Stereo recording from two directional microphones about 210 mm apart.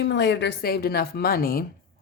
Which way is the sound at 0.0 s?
55° left (ahead or behind).